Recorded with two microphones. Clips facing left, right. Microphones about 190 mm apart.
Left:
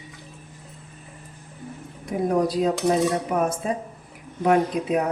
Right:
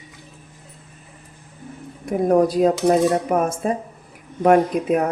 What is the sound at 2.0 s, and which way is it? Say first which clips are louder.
Speech: right 5 dB; 50° right (ahead or behind).